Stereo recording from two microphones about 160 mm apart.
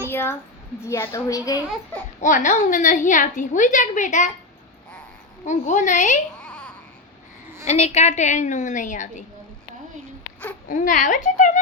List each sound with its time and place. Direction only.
0.1 s a child's voice: 15° left (ahead or behind)
2.2 s a woman's voice: 50° left (ahead or behind)
5.5 s a woman's voice: 50° left (ahead or behind)
6.4 s babbling: 10° left (ahead or behind)
7.7 s a woman's voice: 45° left (ahead or behind)
10.7 s a woman's voice: 50° left (ahead or behind)